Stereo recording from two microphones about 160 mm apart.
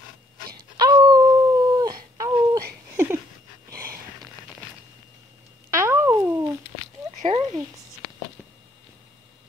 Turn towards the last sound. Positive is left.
turn(degrees=-40)  # may be behind; listen again after turning